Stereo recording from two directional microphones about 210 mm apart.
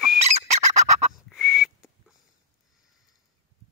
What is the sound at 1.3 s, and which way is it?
Whistle, centre (ahead or behind).